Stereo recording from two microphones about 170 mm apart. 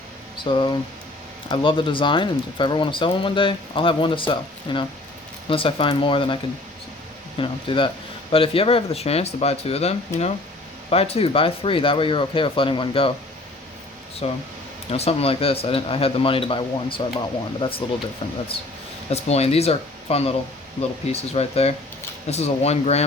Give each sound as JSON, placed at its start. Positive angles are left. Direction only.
{"t": 0.4, "sound": "speech", "side_deg": 25}
{"t": 14.2, "sound": "speech", "side_deg": 35}
{"t": 19.1, "sound": "speech", "side_deg": 40}